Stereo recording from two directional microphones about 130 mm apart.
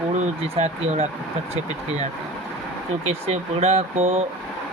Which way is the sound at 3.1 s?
55° right (ahead or behind).